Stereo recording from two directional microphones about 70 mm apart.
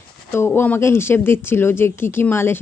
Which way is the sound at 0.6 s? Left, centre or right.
Left.